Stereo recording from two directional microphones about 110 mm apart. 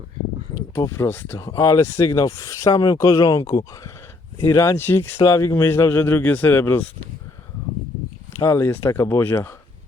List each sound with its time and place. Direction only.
0.5 s speech: 25° left (ahead or behind)
8.4 s speech: 25° left (ahead or behind)